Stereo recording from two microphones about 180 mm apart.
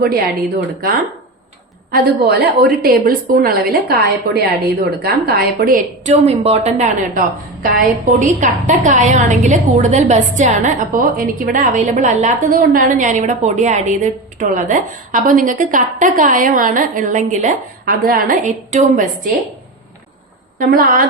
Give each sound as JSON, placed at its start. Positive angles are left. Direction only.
{"t": 1.9, "sound": "a woman's voice", "side_deg": -60}
{"t": 6.2, "sound": "a woman's voice", "side_deg": -35}
{"t": 20.6, "sound": "a woman's voice", "side_deg": -55}